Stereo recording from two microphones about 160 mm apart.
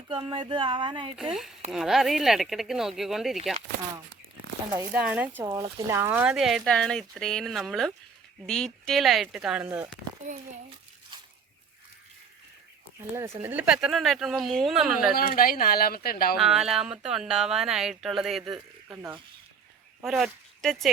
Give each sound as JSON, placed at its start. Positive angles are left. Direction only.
{"t": 0.1, "sound": "speech", "side_deg": -30}
{"t": 1.1, "sound": "speech", "side_deg": -5}
{"t": 4.7, "sound": "speech", "side_deg": -10}
{"t": 6.3, "sound": "speech", "side_deg": 0}
{"t": 9.6, "sound": "speech", "side_deg": -15}
{"t": 13.0, "sound": "speech", "side_deg": -15}
{"t": 15.1, "sound": "speech", "side_deg": 65}
{"t": 16.4, "sound": "speech", "side_deg": -5}
{"t": 20.1, "sound": "speech", "side_deg": 0}